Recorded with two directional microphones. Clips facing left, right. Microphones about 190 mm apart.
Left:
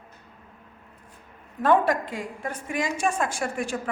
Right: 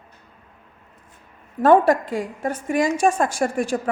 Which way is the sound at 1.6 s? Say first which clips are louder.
Right 6 dB; 35° right (ahead or behind).